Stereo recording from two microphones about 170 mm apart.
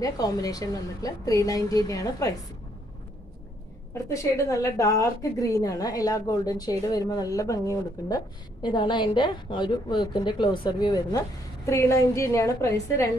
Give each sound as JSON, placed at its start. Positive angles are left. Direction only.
{"t": 0.0, "sound": "a woman's voice", "side_deg": 20}
{"t": 4.1, "sound": "a woman's voice", "side_deg": 15}